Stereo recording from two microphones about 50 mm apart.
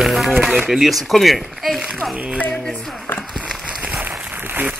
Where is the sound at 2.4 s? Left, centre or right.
Left.